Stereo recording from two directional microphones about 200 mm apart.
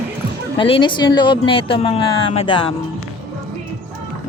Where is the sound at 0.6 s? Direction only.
25° left (ahead or behind).